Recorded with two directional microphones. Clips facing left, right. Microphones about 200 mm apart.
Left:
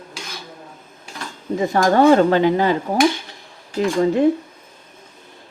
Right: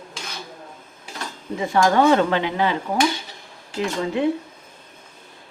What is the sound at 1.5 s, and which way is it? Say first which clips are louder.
Speech: left 2 dB; 40° left (ahead or behind).